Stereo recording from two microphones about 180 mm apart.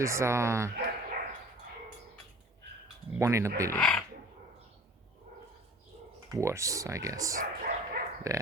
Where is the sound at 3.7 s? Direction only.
5° left (ahead or behind).